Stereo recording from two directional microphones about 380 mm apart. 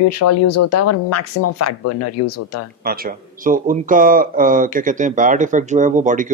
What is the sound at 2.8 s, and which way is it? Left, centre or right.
A man's voice, right.